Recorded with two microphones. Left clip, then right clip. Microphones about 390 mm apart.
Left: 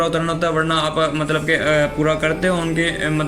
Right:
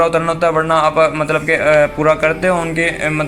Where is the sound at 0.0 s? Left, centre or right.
Centre.